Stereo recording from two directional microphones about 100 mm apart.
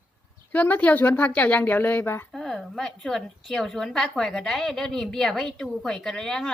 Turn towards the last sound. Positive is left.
turn(degrees=5)  # may be behind; listen again after turning